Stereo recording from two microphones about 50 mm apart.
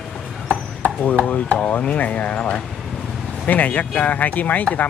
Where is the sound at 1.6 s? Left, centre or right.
Left.